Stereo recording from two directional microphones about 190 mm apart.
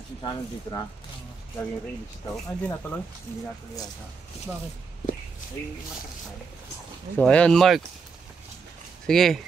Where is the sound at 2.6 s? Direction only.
10° left (ahead or behind).